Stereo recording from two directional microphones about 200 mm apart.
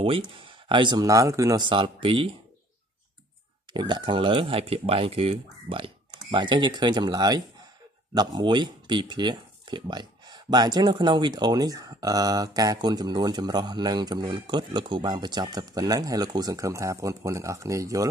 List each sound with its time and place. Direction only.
0.3 s speech: 25° right (ahead or behind)
3.7 s speech: 20° right (ahead or behind)